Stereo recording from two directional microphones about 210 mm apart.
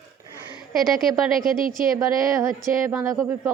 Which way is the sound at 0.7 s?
Centre (ahead or behind).